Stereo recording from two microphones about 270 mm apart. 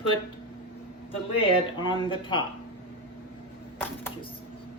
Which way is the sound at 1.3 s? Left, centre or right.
Centre.